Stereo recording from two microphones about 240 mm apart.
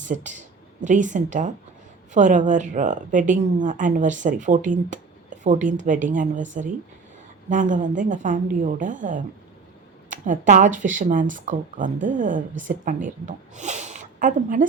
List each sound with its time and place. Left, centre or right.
0.0 s a woman's voice: right